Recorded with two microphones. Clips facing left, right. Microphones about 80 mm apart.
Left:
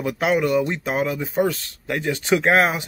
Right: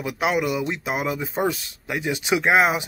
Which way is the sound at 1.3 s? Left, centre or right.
Right.